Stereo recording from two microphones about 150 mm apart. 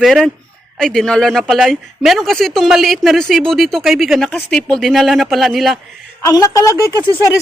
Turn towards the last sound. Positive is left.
turn(degrees=20)  # may be behind; listen again after turning